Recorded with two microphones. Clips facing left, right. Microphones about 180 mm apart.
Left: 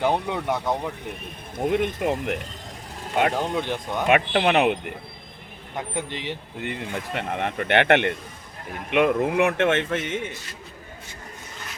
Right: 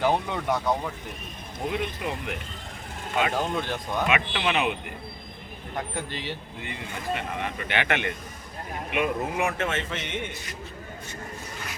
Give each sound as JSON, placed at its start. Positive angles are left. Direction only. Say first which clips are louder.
{"t": 0.0, "sound": "speech", "louder": "left 1 dB", "side_deg": 15}
{"t": 1.5, "sound": "speech", "louder": "left 7 dB", "side_deg": 50}
{"t": 3.3, "sound": "speech", "louder": "left 2 dB", "side_deg": 15}
{"t": 4.1, "sound": "speech", "louder": "left 9 dB", "side_deg": 50}
{"t": 6.1, "sound": "speech", "louder": "left 2 dB", "side_deg": 20}
{"t": 6.6, "sound": "speech", "louder": "left 6 dB", "side_deg": 60}
{"t": 8.9, "sound": "speech", "louder": "left 7 dB", "side_deg": 75}